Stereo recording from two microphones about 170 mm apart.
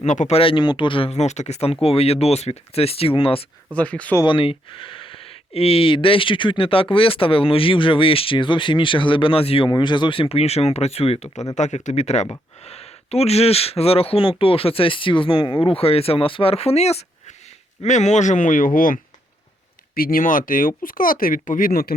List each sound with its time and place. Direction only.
0.0 s speech: 45° left (ahead or behind)
3.8 s speech: 10° left (ahead or behind)
4.2 s speech: 30° left (ahead or behind); by 18.9 s 55° left (ahead or behind)
20.0 s speech: 60° left (ahead or behind)